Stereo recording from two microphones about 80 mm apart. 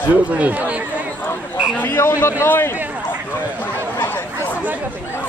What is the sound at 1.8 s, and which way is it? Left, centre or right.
Speech, left.